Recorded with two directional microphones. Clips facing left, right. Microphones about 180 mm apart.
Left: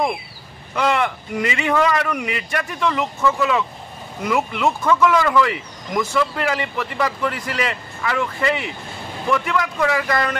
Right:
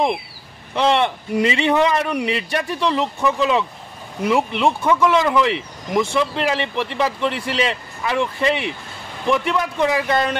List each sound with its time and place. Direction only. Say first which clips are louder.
0.7 s speech: right 2 dB; 25° right (ahead or behind)
3.2 s speech: even; 20° right (ahead or behind)